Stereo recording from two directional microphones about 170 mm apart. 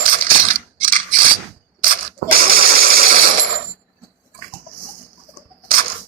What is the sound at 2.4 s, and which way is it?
Engine, 60° right (ahead or behind).